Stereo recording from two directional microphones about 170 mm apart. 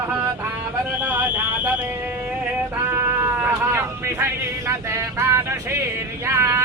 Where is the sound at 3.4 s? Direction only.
15° right (ahead or behind).